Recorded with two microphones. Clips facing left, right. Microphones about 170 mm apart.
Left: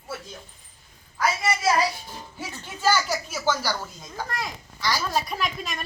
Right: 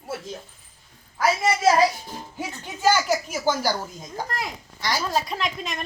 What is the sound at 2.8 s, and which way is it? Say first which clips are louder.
Speech: right 3 dB; 15° right (ahead or behind).